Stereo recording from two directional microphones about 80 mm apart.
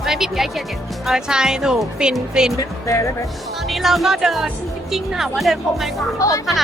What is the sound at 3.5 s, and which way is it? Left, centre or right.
Speech, centre.